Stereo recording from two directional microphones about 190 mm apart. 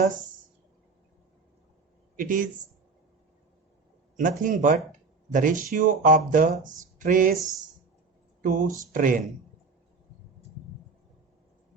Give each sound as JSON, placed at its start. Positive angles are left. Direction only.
{"t": 2.1, "sound": "speech", "side_deg": -45}
{"t": 4.2, "sound": "speech", "side_deg": -45}
{"t": 4.9, "sound": "a sound", "side_deg": -45}
{"t": 5.7, "sound": "speech", "side_deg": -45}
{"t": 8.4, "sound": "speech", "side_deg": -45}